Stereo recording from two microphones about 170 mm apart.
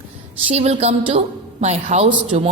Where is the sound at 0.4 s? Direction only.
40° right (ahead or behind).